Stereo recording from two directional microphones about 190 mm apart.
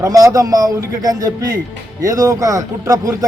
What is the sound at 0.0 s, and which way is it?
A man's voice, 20° right (ahead or behind).